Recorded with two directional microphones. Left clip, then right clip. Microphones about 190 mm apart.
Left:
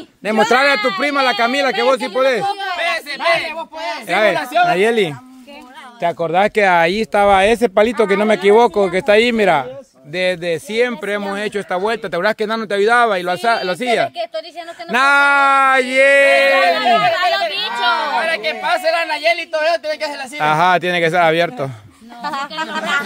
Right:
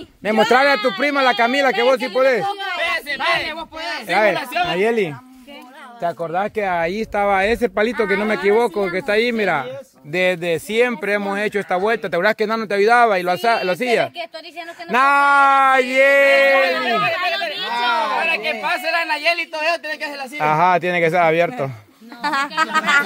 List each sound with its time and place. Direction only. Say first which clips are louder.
0.2 s speech: left 1 dB; 5° left (ahead or behind)
4.1 s a man's voice: left 2 dB; 10° left (ahead or behind); by 6.2 s 25° left (ahead or behind)
6.2 s speech: left 9 dB; 40° left (ahead or behind); by 9.7 s 20° left (ahead or behind)
10.1 s a man's voice: even; 5° right (ahead or behind)
15.3 s speech: left 1 dB; 25° left (ahead or behind)
15.9 s a man's voice: left 2 dB; 15° left (ahead or behind)
16.2 s speech: left 2 dB; 25° left (ahead or behind)
16.9 s speech: left 5 dB; 75° left (ahead or behind)
18.3 s a man's voice: left 3 dB; 15° left (ahead or behind)
22.2 s speech: right 3 dB; 60° right (ahead or behind)